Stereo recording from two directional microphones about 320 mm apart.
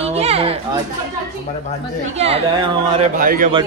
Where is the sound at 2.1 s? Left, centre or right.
Centre.